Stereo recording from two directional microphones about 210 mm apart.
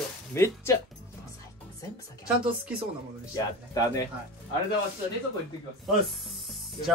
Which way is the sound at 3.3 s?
15° left (ahead or behind).